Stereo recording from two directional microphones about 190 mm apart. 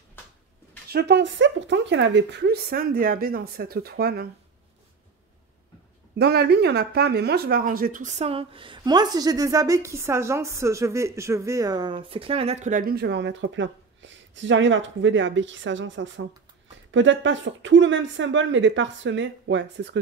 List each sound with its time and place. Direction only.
0.9 s speech: 60° right (ahead or behind)
6.1 s speech: 55° right (ahead or behind)